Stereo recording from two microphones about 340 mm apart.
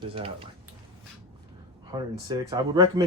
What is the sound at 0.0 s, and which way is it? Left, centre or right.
Speech, centre.